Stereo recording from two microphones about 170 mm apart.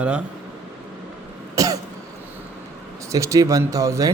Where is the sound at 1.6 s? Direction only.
20° right (ahead or behind).